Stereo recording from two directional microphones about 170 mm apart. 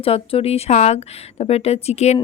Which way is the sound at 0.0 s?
35° left (ahead or behind).